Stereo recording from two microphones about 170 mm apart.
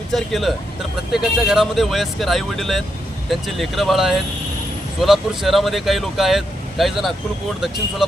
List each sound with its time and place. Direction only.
0.1 s speech: centre (ahead or behind)